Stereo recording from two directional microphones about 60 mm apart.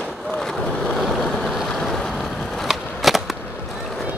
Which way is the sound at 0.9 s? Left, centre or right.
Centre.